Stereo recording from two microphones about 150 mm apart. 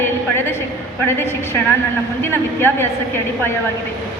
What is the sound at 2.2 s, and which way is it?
Speech, 15° left (ahead or behind).